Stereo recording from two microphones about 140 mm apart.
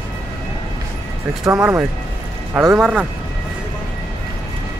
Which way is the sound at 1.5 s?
15° right (ahead or behind).